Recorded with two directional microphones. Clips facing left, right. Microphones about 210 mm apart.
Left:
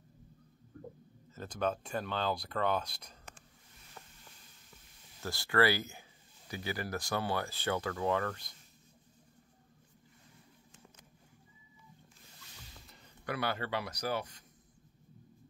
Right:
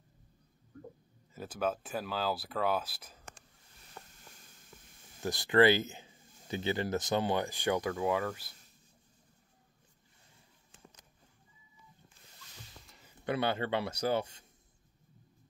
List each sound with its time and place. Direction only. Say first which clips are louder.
1.3 s speech: even; 5° right (ahead or behind)
5.2 s speech: right 5 dB; 20° right (ahead or behind)
12.8 s a sound: left 2 dB; centre (ahead or behind)
13.2 s speech: right 4 dB; 25° right (ahead or behind)